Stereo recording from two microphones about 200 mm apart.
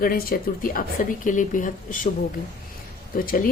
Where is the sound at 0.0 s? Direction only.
45° left (ahead or behind).